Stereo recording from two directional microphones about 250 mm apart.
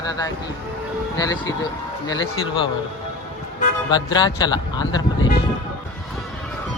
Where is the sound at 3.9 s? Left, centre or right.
Centre.